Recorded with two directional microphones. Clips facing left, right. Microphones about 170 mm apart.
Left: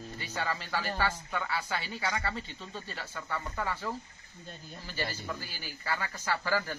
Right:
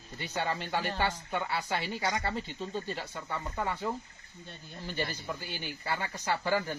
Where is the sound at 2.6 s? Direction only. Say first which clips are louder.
Right 6 dB; 25° right (ahead or behind).